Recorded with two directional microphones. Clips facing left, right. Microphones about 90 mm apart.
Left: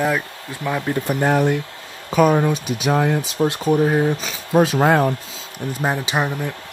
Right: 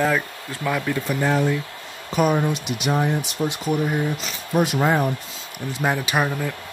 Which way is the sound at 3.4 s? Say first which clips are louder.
Left 7 dB; 60° left (ahead or behind).